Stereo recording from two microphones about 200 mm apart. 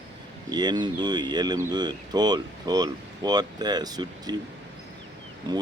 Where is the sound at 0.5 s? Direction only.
20° right (ahead or behind).